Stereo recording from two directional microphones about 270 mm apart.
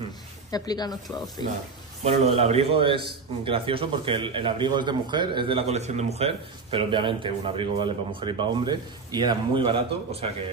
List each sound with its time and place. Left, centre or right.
0.5 s speech: centre
2.0 s a man's voice: right